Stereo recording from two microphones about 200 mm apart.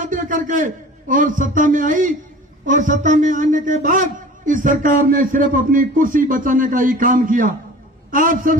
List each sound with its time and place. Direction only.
0.0 s a man's voice: 40° right (ahead or behind)